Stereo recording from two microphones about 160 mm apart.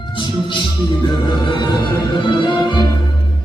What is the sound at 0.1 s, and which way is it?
Music, 30° left (ahead or behind).